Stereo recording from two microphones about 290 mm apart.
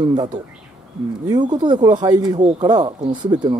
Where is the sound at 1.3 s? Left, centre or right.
Centre.